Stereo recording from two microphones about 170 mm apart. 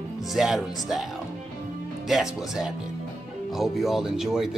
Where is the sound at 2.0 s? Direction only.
Centre (ahead or behind).